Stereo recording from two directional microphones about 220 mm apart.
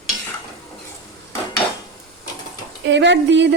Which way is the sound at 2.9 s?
55° right (ahead or behind).